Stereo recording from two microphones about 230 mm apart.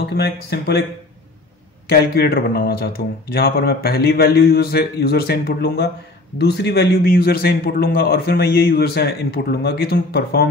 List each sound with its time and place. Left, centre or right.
0.0 s a man's voice: left
1.9 s a man's voice: left